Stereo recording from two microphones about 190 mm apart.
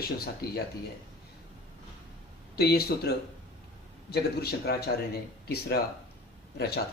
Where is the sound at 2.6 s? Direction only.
60° left (ahead or behind).